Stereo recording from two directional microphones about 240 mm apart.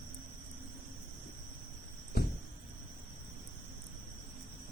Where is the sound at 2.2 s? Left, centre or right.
Left.